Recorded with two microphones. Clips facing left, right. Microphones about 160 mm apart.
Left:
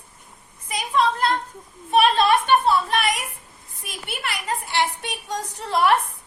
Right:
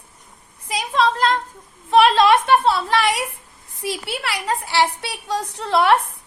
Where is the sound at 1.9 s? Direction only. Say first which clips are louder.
Right 4 dB; 90° right.